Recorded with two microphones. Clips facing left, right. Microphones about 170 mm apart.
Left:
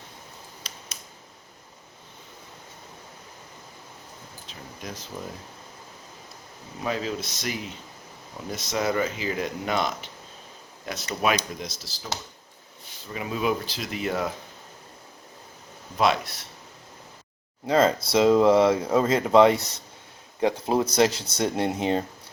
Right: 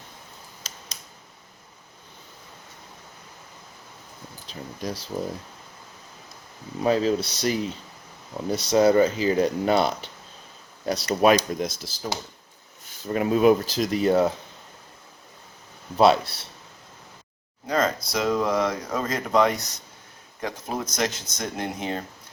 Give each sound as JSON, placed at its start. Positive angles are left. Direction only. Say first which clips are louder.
{"t": 4.4, "sound": "a sound", "louder": "right 7 dB", "side_deg": -35}
{"t": 6.8, "sound": "speech", "louder": "right 7 dB", "side_deg": -35}
{"t": 16.0, "sound": "speech", "louder": "right 5 dB", "side_deg": -30}
{"t": 17.7, "sound": "speech", "louder": "left 4 dB", "side_deg": 25}